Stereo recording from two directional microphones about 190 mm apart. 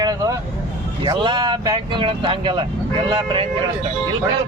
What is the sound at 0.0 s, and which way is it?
Vehicle, 20° right (ahead or behind).